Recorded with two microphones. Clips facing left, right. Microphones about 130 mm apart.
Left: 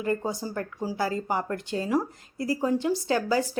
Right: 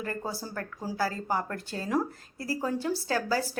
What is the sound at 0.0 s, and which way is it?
A woman's voice, 15° left (ahead or behind).